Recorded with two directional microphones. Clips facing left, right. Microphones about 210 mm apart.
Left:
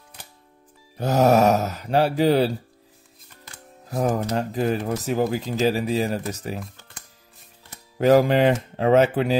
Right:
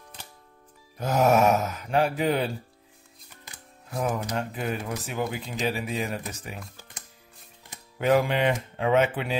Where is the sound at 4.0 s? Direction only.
40° left (ahead or behind).